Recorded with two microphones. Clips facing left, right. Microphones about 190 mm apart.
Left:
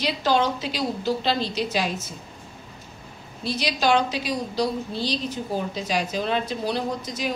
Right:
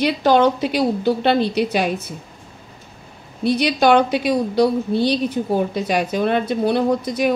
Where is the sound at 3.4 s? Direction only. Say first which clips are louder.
Right 8 dB; 60° right (ahead or behind).